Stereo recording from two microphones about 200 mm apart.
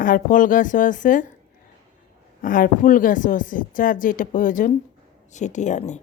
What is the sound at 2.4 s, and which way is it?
A woman's voice, 45° left (ahead or behind).